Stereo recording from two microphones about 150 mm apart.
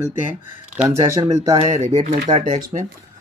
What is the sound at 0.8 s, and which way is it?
Speech, 20° right (ahead or behind).